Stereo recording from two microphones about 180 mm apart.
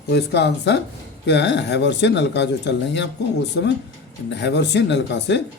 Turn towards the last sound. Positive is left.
turn(degrees=75)  # may be behind; listen again after turning